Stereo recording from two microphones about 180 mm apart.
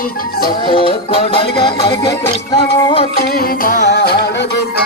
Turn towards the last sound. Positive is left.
turn(degrees=65)  # may be behind; listen again after turning